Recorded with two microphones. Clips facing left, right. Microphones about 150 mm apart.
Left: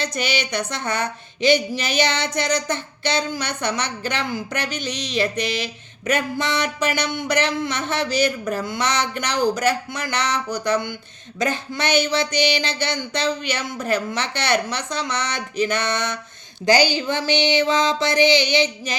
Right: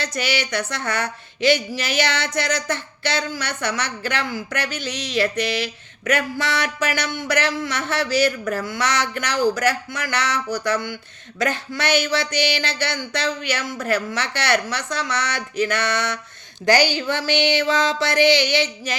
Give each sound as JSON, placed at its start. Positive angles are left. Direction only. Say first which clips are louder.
{"t": 0.0, "sound": "a woman's voice", "louder": "even", "side_deg": 20}